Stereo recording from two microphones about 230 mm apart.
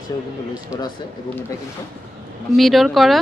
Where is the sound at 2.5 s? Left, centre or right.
Centre.